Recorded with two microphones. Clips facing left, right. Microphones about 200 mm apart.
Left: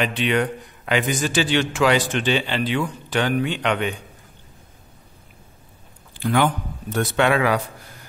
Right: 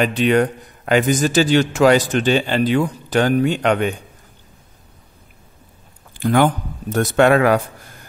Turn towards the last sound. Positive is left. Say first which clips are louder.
# right 6 dB
turn(degrees=-50)  # may be behind; listen again after turning